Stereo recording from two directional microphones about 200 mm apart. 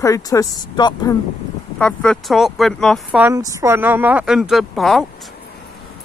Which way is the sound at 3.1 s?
10° right (ahead or behind).